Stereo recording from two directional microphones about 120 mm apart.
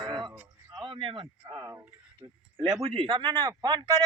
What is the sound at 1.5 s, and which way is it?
Speech, 25° right (ahead or behind).